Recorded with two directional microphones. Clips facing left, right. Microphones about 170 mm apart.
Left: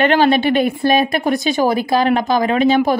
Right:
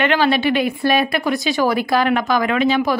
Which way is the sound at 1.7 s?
30° left (ahead or behind).